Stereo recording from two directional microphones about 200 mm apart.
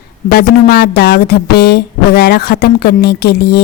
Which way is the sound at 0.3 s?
50° left (ahead or behind).